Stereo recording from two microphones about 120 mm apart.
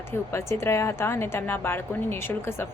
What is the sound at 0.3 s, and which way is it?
A woman's voice, 25° left (ahead or behind).